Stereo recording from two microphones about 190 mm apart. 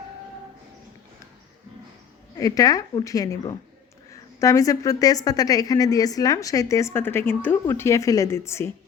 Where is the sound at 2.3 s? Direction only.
20° left (ahead or behind).